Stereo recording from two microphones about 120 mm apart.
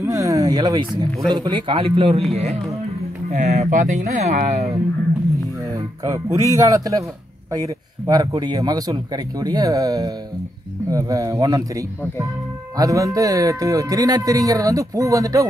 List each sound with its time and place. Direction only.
0.0 s a man's voice: 25° right (ahead or behind); by 2.2 s 50° right (ahead or behind)
3.3 s speech: 80° right
5.7 s speech: 30° right (ahead or behind)